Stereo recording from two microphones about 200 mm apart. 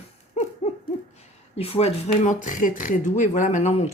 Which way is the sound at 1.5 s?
30° left (ahead or behind).